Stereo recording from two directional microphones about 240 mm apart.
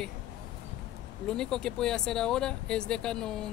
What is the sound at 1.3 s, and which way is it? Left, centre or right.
Speech, centre.